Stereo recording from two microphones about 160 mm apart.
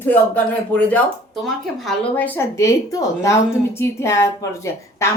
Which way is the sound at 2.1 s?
15° left (ahead or behind).